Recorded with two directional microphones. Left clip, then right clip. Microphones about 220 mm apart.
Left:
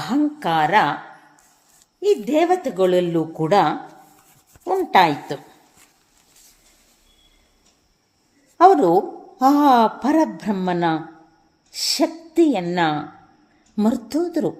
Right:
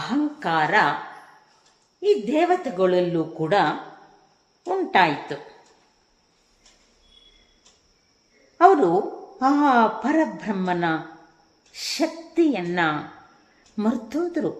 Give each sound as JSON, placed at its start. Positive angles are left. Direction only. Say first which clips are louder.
{"t": 0.0, "sound": "a woman's voice", "louder": "left 4 dB", "side_deg": 45}
{"t": 2.0, "sound": "speech", "louder": "left 2 dB", "side_deg": 45}
{"t": 8.5, "sound": "a woman's voice", "louder": "left 3 dB", "side_deg": 45}